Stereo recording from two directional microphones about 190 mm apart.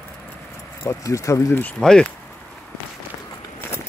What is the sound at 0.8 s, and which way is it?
Speech, 15° left (ahead or behind).